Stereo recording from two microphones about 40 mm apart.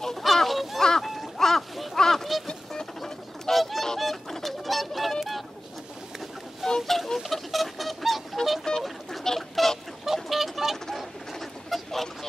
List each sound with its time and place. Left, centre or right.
0.0 s a sound: centre
2.4 s goose: centre
3.5 s goose: centre
4.0 s bird: centre
6.6 s fowl: centre
7.2 s bird: centre
8.7 s a sound: left
10.0 s a sound: centre
11.0 s duck: centre